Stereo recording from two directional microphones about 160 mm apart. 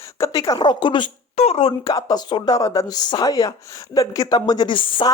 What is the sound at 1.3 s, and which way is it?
Speech, 40° left (ahead or behind).